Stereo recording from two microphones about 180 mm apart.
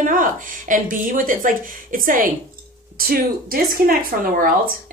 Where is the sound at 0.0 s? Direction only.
50° right (ahead or behind).